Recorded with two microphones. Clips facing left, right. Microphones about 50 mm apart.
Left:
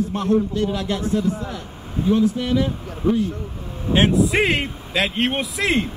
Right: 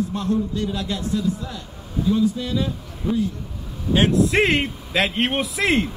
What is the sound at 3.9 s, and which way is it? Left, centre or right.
Speech, left.